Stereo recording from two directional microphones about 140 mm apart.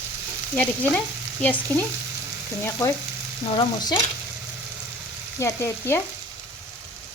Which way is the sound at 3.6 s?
35° left (ahead or behind).